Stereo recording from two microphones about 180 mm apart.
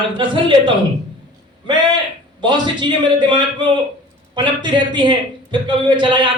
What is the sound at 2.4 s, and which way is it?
Speech, 25° right (ahead or behind).